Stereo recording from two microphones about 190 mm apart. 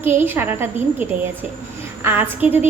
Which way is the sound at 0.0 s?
10° right (ahead or behind).